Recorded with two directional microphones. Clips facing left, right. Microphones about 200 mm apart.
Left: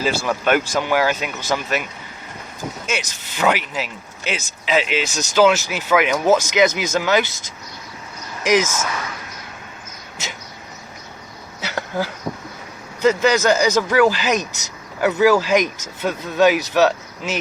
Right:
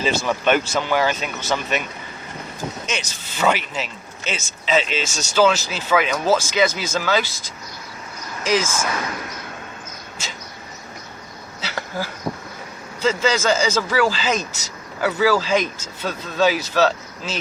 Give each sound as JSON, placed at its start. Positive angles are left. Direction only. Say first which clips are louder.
{"t": 0.0, "sound": "speech", "louder": "even", "side_deg": 5}
{"t": 2.8, "sound": "speech", "louder": "left 2 dB", "side_deg": 10}
{"t": 8.4, "sound": "speech", "louder": "left 3 dB", "side_deg": 20}
{"t": 11.6, "sound": "insect", "louder": "left 4 dB", "side_deg": 20}
{"t": 13.0, "sound": "speech", "louder": "left 4 dB", "side_deg": 15}